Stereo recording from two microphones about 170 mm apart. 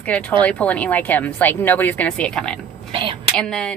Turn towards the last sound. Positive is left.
turn(degrees=5)  # may be behind; listen again after turning